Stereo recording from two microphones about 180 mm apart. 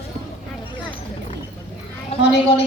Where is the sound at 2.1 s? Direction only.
30° left (ahead or behind).